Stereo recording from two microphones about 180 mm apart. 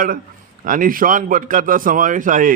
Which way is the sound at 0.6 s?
50° right (ahead or behind).